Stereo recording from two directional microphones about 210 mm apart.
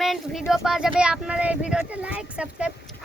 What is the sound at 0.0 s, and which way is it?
A child's voice, centre (ahead or behind).